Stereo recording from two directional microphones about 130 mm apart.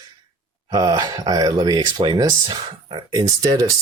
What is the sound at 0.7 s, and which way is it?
Speech, 30° right (ahead or behind).